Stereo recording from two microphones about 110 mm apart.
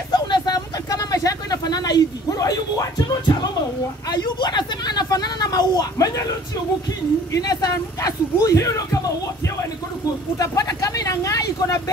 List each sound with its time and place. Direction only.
0.1 s vehicle: 40° left (ahead or behind)
4.1 s speech: 40° left (ahead or behind)
7.4 s speech: 35° left (ahead or behind)
10.3 s speech: 30° left (ahead or behind)